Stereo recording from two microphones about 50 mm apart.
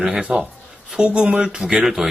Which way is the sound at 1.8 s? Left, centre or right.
Centre.